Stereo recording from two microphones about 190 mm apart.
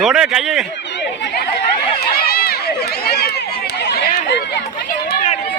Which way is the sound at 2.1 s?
55° left (ahead or behind).